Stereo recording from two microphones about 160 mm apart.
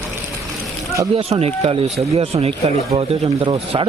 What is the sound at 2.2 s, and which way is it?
Speech, 40° right (ahead or behind).